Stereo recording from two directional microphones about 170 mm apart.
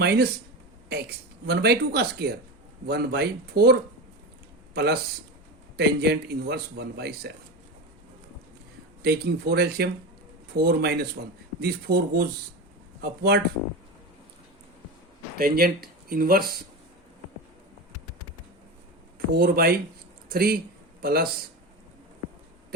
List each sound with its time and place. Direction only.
0.0 s speech: 70° right (ahead or behind)
1.5 s a man's voice: 70° right (ahead or behind)
9.0 s a man's voice: 70° right (ahead or behind)
15.4 s speech: 65° right (ahead or behind)
19.3 s speech: 65° right (ahead or behind)